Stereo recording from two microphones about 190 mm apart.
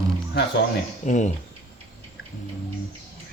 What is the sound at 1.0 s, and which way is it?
Speech, 40° left (ahead or behind).